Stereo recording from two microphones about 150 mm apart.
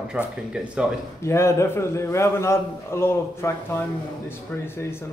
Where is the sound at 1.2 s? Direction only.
20° left (ahead or behind).